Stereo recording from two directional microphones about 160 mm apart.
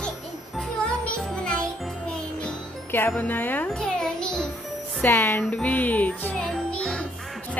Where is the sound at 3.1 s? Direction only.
10° left (ahead or behind).